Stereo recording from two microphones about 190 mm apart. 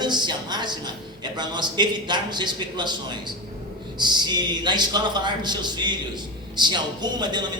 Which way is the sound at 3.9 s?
25° right (ahead or behind).